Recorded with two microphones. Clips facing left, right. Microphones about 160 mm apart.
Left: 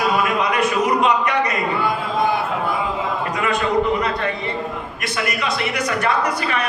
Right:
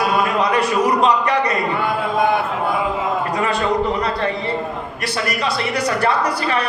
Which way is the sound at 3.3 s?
35° right (ahead or behind).